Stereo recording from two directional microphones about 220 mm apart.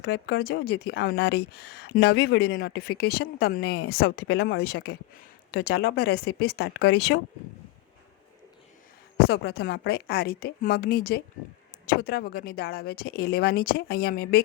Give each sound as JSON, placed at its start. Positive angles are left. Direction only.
{"t": 0.0, "sound": "speech", "side_deg": 50}
{"t": 9.1, "sound": "speech", "side_deg": 45}